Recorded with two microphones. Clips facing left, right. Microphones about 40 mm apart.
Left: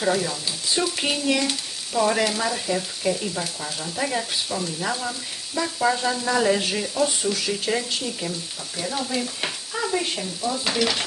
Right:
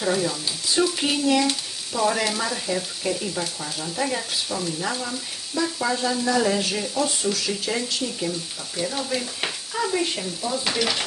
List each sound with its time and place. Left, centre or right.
0.0 s frying: centre
6.7 s frying: centre